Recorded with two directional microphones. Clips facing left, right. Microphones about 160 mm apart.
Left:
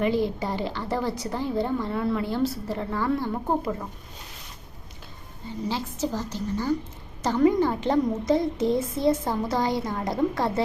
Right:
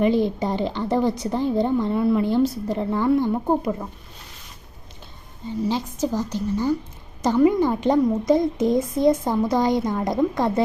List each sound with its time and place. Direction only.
0.0 s a woman's voice: 20° right (ahead or behind)
5.6 s a woman's voice: 15° right (ahead or behind)